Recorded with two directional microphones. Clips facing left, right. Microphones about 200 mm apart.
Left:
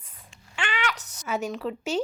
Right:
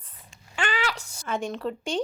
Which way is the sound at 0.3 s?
40° right (ahead or behind).